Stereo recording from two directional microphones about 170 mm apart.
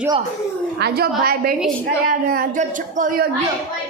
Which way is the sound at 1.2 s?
60° right (ahead or behind).